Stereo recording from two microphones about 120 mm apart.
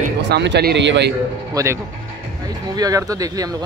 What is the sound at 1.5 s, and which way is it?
Speech, 25° right (ahead or behind).